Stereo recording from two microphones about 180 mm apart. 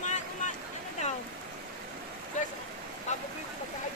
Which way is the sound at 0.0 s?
40° left (ahead or behind).